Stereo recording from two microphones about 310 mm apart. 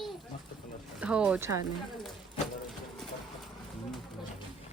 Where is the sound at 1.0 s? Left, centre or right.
Centre.